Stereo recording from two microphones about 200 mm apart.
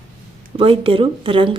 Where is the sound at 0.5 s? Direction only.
25° right (ahead or behind).